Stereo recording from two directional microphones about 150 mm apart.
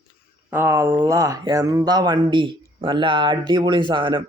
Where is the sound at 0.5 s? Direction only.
15° right (ahead or behind).